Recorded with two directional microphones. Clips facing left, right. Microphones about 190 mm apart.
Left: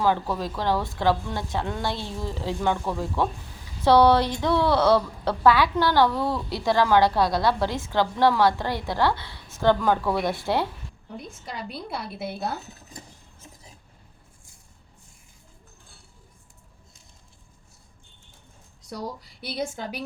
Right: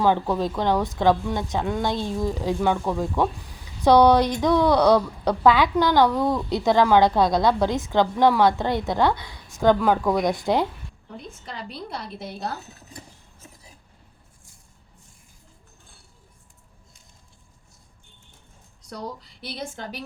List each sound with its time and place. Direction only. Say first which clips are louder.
0.0 s a woman's voice: right 3 dB; 20° right (ahead or behind)
11.4 s a woman's voice: left 1 dB; 10° left (ahead or behind)